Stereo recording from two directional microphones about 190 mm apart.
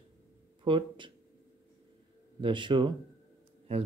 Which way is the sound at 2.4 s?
25° right (ahead or behind).